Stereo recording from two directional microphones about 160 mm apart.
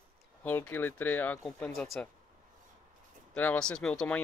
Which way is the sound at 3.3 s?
10° left (ahead or behind).